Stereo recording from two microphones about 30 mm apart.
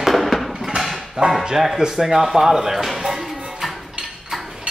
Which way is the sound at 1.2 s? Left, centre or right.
Right.